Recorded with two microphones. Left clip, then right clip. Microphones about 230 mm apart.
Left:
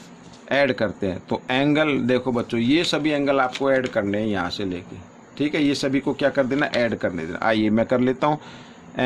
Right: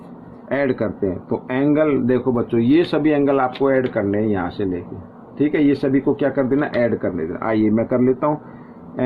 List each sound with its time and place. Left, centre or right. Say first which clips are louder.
0.4 s speech: even; left